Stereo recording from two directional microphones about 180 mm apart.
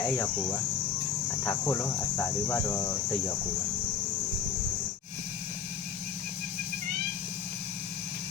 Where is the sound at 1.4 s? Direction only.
15° left (ahead or behind).